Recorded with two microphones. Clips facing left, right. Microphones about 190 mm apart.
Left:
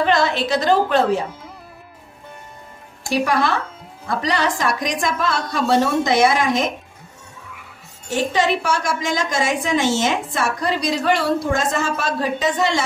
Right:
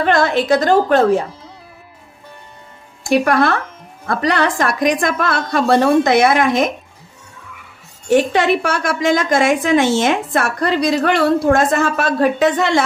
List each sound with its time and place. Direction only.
0.0 s a woman's voice: 50° right (ahead or behind)
3.1 s a woman's voice: 60° right (ahead or behind)
8.1 s a woman's voice: 60° right (ahead or behind)